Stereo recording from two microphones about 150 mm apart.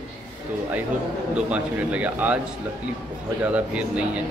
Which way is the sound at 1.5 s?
10° right (ahead or behind).